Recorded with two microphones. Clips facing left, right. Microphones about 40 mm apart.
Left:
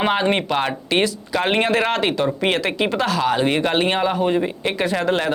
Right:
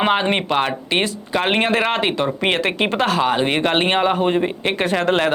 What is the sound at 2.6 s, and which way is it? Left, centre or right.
Speech, right.